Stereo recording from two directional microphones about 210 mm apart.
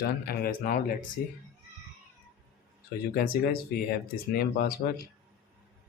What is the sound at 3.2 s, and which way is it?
Speech, 45° left (ahead or behind).